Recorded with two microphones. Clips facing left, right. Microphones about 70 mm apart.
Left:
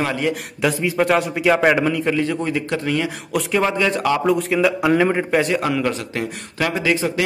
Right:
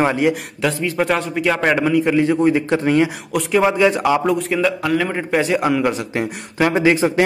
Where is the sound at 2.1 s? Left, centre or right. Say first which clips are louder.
Right 5 dB; centre.